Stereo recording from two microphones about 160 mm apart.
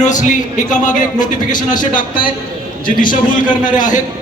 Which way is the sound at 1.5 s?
25° left (ahead or behind).